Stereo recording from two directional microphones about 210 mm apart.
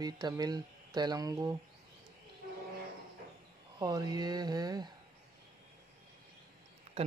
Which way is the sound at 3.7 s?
20° right (ahead or behind).